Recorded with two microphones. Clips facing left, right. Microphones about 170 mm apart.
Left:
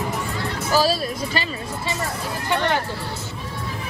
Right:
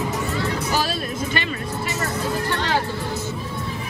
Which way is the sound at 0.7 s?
35° left (ahead or behind).